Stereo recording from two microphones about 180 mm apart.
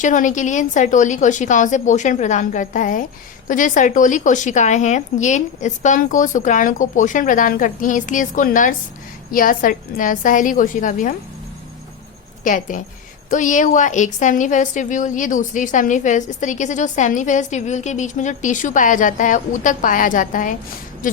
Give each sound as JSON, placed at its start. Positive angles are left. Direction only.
{"t": 0.0, "sound": "a woman's voice", "side_deg": 45}
{"t": 12.5, "sound": "a woman's voice", "side_deg": 45}